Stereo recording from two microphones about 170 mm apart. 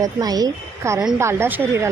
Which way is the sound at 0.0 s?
20° right (ahead or behind).